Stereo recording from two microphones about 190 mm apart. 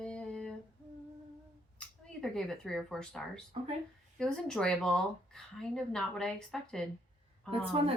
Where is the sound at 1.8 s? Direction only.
Centre (ahead or behind).